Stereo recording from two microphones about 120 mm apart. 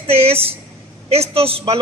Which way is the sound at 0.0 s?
55° right (ahead or behind).